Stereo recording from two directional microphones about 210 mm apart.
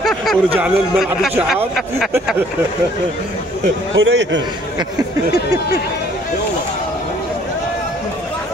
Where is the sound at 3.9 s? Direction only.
65° right (ahead or behind).